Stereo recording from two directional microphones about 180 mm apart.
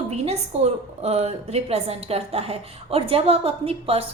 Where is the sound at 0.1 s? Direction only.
35° right (ahead or behind).